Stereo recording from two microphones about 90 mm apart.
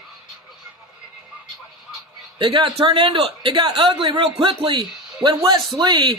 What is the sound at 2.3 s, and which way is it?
A man's voice, 65° right (ahead or behind).